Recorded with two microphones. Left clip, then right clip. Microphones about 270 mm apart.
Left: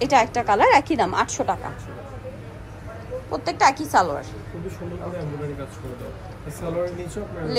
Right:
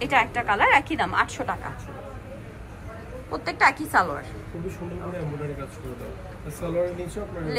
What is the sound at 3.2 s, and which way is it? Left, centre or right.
A woman's voice, centre.